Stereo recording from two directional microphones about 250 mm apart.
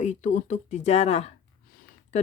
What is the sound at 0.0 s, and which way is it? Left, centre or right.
Speech, left.